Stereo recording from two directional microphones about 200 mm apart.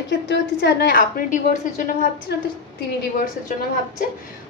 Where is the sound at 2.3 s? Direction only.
55° left (ahead or behind).